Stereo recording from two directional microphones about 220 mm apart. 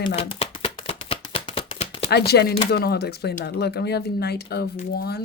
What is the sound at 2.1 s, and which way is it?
Speech, 45° left (ahead or behind).